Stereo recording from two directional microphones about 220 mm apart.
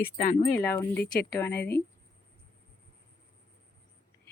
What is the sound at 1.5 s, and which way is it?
Speech, 50° left (ahead or behind).